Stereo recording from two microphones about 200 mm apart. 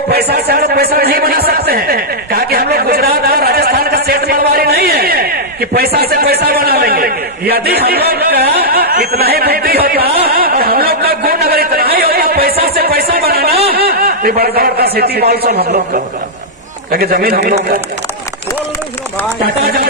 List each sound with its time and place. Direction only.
0.1 s a man's voice: 50° right (ahead or behind)
19.6 s a man's voice: 50° right (ahead or behind)